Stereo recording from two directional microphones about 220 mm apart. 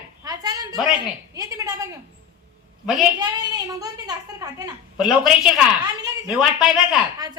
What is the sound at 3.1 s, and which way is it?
Speech, 20° right (ahead or behind).